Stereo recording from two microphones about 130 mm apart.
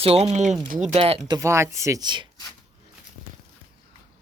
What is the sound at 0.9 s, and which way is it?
Speech, 50° right (ahead or behind).